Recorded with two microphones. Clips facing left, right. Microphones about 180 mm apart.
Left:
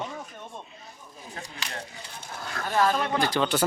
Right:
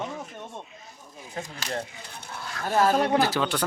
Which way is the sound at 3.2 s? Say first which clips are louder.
Even; 5° right (ahead or behind).